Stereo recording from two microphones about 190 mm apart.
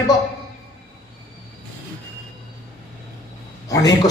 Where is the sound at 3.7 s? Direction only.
20° left (ahead or behind).